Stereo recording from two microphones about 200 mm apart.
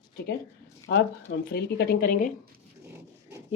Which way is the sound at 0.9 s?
60° left (ahead or behind).